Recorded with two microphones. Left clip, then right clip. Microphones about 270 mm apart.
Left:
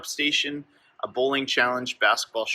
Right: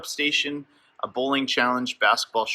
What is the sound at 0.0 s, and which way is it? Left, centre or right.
Speech, centre.